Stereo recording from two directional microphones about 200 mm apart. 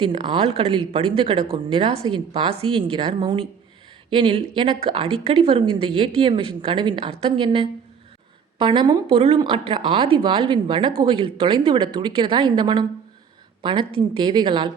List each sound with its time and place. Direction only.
0.3 s a woman's voice: 30° right (ahead or behind)